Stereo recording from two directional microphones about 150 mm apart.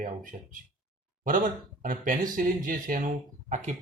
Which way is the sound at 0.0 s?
65° right (ahead or behind).